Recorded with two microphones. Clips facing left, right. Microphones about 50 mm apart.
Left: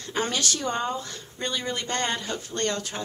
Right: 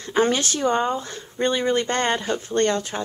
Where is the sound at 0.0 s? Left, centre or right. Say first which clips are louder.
Right 7 dB; right.